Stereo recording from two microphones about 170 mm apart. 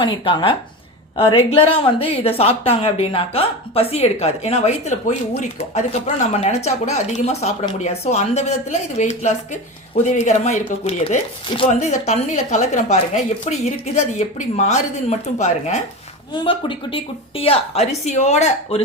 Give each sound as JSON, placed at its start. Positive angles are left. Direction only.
{"t": 0.0, "sound": "a woman's voice", "side_deg": 25}
{"t": 11.7, "sound": "a woman's voice", "side_deg": 45}
{"t": 16.3, "sound": "a woman's voice", "side_deg": 30}